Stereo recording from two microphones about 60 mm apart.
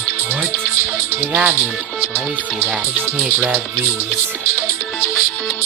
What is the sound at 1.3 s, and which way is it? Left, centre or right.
Speech, right.